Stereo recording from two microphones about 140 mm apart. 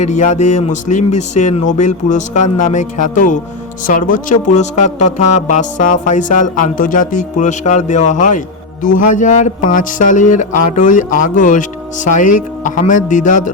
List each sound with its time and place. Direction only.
0.0 s speech: 60° left (ahead or behind)